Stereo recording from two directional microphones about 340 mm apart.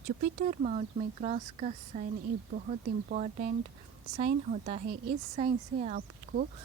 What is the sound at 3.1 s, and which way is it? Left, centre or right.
A woman's voice, right.